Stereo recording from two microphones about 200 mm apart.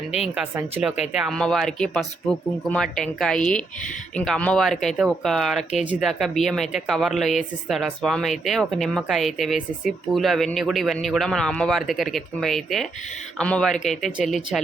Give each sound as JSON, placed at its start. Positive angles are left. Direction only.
{"t": 0.3, "sound": "speech", "side_deg": -5}